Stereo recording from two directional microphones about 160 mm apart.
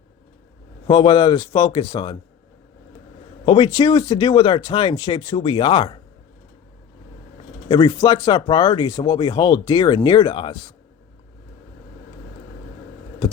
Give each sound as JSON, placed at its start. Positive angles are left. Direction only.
{"t": 0.9, "sound": "speech", "side_deg": 30}
{"t": 3.4, "sound": "speech", "side_deg": 30}
{"t": 7.7, "sound": "speech", "side_deg": 25}